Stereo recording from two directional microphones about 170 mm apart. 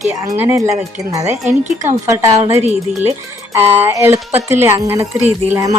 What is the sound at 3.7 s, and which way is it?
A woman's voice, 15° right (ahead or behind).